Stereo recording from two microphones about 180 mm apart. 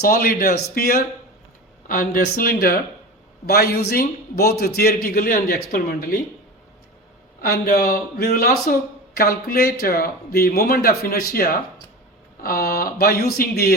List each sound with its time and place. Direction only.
0.0 s a man's voice: 55° left (ahead or behind)
7.4 s a man's voice: 55° left (ahead or behind)